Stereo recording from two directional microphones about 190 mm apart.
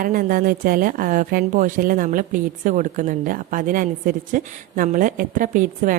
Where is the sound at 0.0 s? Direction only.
50° right (ahead or behind).